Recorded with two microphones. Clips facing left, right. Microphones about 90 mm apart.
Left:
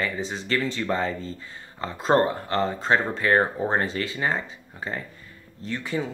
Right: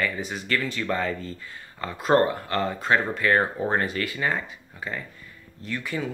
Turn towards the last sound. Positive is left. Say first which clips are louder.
# left 1 dB
turn(degrees=25)  # may be behind; listen again after turning